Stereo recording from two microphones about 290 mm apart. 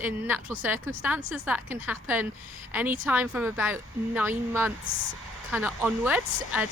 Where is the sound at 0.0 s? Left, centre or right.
Centre.